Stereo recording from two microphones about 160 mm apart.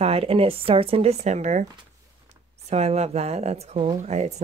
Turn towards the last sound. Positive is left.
turn(degrees=-45)  # may be behind; listen again after turning